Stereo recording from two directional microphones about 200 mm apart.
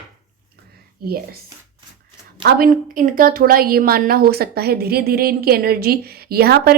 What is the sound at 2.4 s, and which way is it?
A woman's voice, 50° right (ahead or behind).